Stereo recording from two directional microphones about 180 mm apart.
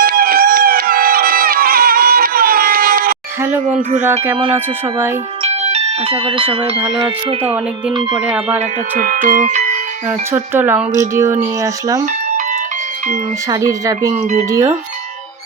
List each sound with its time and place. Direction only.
0.0 s music: 55° right (ahead or behind)
3.7 s speech: 45° right (ahead or behind)
4.5 s speech: 10° right (ahead or behind)
5.4 s bell: 35° right (ahead or behind)
6.7 s speech: 5° right (ahead or behind)
7.0 s speech: 30° right (ahead or behind)
8.1 s speech: 5° right (ahead or behind)
8.5 s speech: 50° right (ahead or behind)
10.1 s speech: 10° right (ahead or behind)
13.5 s speech: 20° right (ahead or behind)